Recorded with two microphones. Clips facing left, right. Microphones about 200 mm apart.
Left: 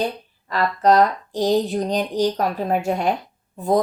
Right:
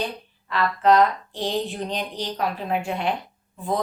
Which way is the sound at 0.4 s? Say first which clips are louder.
Left 2 dB; 40° left (ahead or behind).